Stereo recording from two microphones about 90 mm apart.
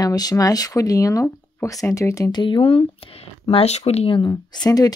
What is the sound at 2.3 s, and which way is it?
Speech, 65° left (ahead or behind).